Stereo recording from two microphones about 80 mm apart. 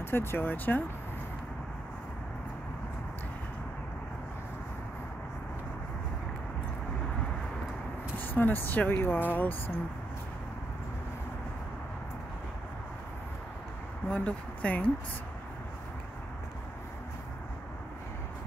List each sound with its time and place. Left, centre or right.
0.0 s speech: left
8.2 s speech: left
14.0 s speech: centre